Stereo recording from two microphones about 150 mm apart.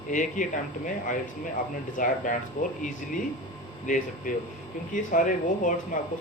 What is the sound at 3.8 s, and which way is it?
Speech, 60° left (ahead or behind).